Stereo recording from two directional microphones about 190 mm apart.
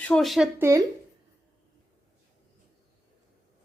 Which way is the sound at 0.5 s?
15° right (ahead or behind).